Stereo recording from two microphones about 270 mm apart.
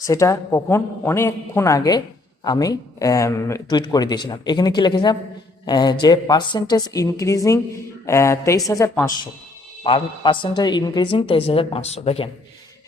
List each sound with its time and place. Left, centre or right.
0.0 s a woman's voice: centre